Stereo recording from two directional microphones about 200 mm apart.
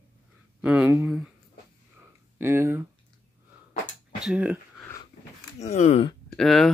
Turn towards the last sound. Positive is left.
turn(degrees=0)  # may be behind; listen again after turning